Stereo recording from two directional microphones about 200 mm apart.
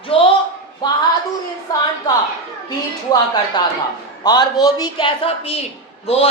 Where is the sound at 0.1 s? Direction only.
25° left (ahead or behind).